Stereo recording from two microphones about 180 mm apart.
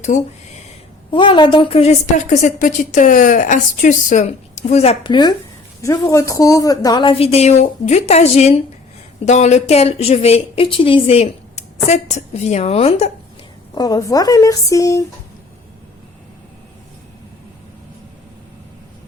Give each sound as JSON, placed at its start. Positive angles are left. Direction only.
{"t": 1.1, "sound": "a woman's voice", "side_deg": 25}
{"t": 13.7, "sound": "speech", "side_deg": 20}